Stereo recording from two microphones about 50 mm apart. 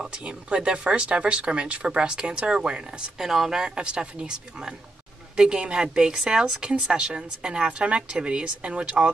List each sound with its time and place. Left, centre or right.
0.0 s a woman's voice: centre
3.2 s a woman's voice: centre; by 9.1 s right